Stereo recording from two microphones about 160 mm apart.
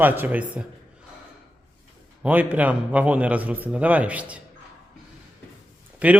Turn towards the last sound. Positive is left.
turn(degrees=-10)  # may be behind; listen again after turning